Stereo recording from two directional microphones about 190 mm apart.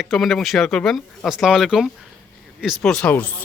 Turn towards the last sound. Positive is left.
turn(degrees=5)  # may be behind; listen again after turning